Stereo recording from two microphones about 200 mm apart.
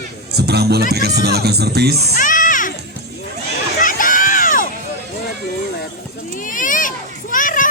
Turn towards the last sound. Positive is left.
turn(degrees=40)  # may be behind; listen again after turning